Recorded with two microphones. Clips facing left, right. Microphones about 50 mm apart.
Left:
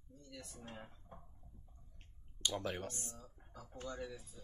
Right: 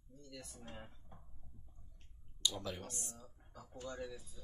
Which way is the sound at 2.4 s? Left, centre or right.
Left.